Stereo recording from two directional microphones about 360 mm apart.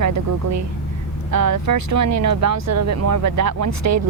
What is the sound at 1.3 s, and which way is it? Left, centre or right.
Speech, right.